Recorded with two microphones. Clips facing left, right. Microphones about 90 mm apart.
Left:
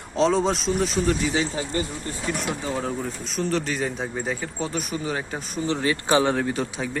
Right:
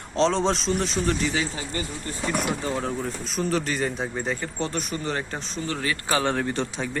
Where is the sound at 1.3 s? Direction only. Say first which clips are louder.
Left 3 dB; 25° left (ahead or behind).